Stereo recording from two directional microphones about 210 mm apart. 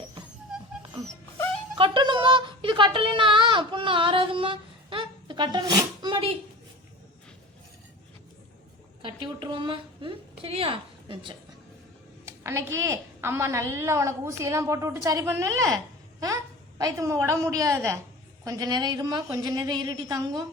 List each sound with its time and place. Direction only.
1.8 s a sound: 25° right (ahead or behind)
9.0 s a woman's voice: 25° right (ahead or behind)
12.2 s a woman's voice: 15° right (ahead or behind)